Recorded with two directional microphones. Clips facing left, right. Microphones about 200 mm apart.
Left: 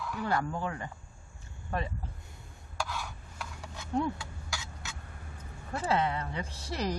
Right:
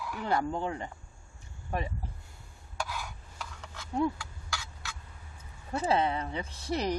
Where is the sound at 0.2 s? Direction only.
20° right (ahead or behind).